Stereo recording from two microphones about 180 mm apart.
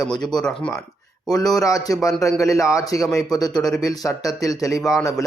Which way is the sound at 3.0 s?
Centre (ahead or behind).